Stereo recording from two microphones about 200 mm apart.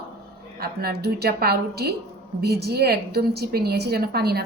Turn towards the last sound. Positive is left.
turn(degrees=-50)  # may be behind; listen again after turning